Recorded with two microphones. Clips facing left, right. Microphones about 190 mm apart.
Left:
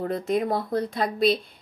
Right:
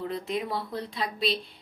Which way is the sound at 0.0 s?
45° left (ahead or behind).